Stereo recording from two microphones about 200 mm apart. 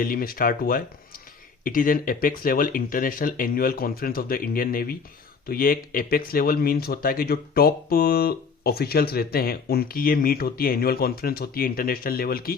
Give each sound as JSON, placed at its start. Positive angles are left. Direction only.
{"t": 0.0, "sound": "speech", "side_deg": 45}